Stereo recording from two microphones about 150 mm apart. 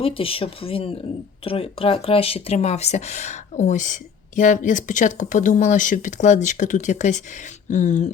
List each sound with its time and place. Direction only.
0.0 s speech: 40° left (ahead or behind); by 8.1 s 55° left (ahead or behind)